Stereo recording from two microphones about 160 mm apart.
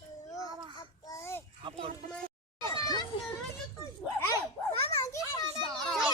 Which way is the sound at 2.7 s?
25° left (ahead or behind).